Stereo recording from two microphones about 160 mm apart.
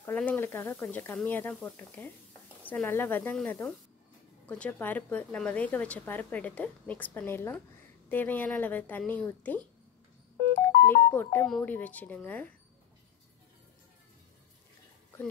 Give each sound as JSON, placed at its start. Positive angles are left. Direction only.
{"t": 0.0, "sound": "speech", "side_deg": 10}
{"t": 10.9, "sound": "speech", "side_deg": 15}